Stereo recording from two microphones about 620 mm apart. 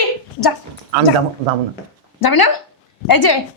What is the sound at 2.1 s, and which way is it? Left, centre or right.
Speech, left.